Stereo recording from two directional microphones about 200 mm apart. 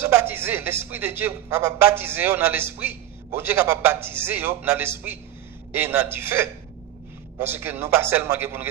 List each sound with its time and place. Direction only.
0.0 s a man's voice: 10° right (ahead or behind)